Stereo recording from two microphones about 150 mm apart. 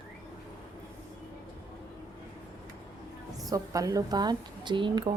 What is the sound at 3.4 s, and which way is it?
A woman's voice, 25° right (ahead or behind).